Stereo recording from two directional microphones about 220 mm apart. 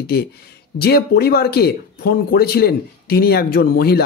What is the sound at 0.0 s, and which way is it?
Speech, 45° left (ahead or behind).